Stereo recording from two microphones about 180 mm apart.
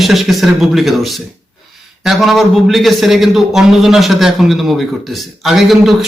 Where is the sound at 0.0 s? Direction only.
Centre (ahead or behind).